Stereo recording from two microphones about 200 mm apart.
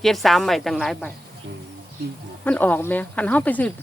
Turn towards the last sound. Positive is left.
turn(degrees=5)  # may be behind; listen again after turning